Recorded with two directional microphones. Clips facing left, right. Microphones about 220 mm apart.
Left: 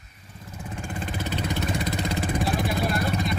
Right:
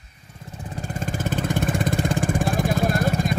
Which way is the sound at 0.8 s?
45° right (ahead or behind).